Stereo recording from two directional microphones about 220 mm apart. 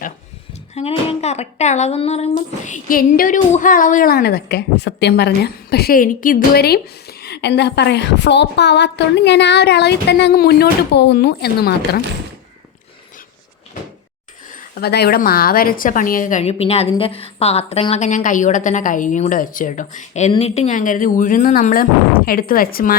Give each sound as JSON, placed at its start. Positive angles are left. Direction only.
{"t": 0.7, "sound": "speech", "side_deg": 30}
{"t": 14.5, "sound": "a woman's voice", "side_deg": 40}